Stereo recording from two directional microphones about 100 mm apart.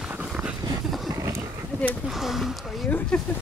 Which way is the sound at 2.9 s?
10° left (ahead or behind).